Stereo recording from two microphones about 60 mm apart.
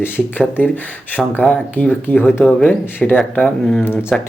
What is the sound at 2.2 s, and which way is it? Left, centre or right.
Speech, left.